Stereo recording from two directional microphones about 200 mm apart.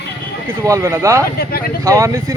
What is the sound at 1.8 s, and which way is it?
Speech, 15° right (ahead or behind).